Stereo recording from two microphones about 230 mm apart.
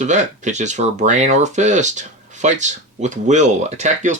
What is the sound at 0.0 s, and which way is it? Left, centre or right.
Speech, right.